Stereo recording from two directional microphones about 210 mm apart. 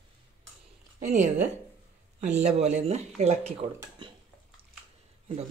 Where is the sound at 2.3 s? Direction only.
30° right (ahead or behind).